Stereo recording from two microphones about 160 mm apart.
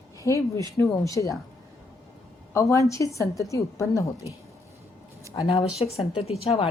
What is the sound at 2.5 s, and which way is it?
A woman's voice, 20° left (ahead or behind).